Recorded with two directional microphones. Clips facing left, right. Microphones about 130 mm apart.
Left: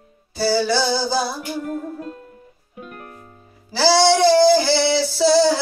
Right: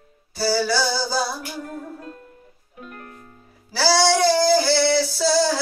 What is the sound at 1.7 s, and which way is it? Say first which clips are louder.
Music: left 6 dB; 5° left (ahead or behind).